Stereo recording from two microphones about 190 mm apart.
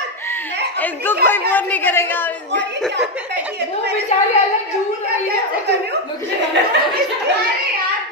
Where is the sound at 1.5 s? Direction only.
10° left (ahead or behind).